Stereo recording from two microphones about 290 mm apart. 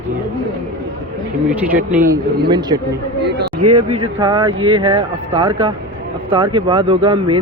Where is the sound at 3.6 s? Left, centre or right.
Right.